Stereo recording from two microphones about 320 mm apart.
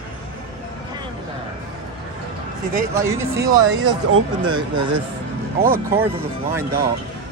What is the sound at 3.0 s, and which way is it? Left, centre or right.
Speech, centre.